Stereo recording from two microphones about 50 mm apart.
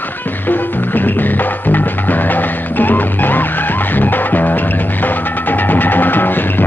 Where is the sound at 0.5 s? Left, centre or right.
Left.